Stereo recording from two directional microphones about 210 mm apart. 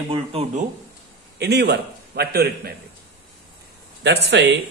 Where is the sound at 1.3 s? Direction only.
50° right (ahead or behind).